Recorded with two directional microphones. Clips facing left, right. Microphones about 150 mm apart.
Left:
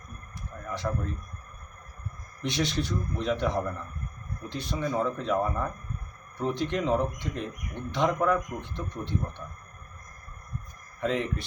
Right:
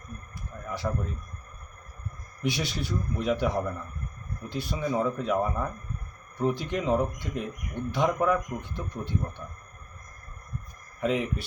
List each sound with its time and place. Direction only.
0.8 s speech: 5° right (ahead or behind)
2.4 s speech: 5° right (ahead or behind)
11.0 s speech: 10° right (ahead or behind)